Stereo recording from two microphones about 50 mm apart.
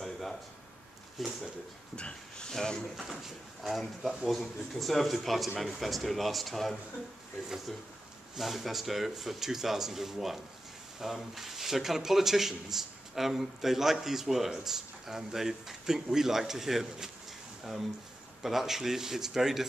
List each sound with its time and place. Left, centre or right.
0.0 s a sound: centre
1.2 s a man's voice: centre
2.0 s speech: centre
3.6 s a man's voice: centre
8.4 s a man's voice: centre
18.4 s a man's voice: centre